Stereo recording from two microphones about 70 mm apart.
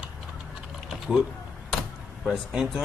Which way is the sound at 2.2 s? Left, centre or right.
Centre.